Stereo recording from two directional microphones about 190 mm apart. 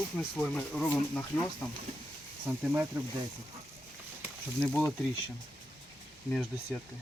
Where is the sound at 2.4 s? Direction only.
10° right (ahead or behind).